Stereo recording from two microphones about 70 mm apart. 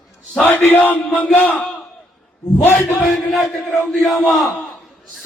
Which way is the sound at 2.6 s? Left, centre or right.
Left.